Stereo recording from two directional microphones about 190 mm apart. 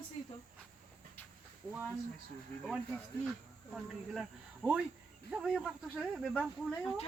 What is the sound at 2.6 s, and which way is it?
Speech, centre (ahead or behind).